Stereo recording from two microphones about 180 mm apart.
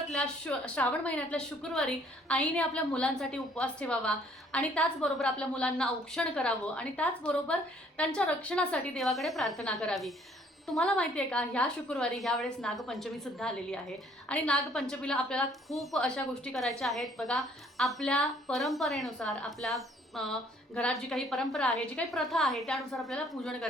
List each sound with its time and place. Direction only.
0.1 s a woman's voice: 5° left (ahead or behind)